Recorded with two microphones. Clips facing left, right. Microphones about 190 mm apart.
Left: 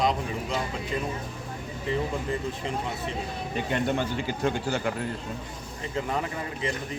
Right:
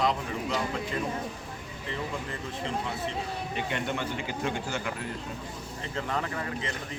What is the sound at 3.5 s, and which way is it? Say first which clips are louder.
Speech: left 6 dB; 40° left (ahead or behind).